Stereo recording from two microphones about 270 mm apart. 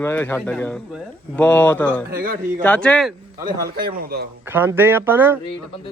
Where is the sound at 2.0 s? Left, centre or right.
Right.